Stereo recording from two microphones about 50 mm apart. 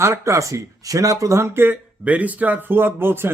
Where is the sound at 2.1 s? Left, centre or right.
Right.